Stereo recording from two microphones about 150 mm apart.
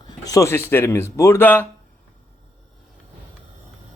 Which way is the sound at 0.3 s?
20° left (ahead or behind).